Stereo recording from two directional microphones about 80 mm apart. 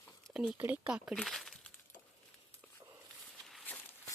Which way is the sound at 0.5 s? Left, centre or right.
Right.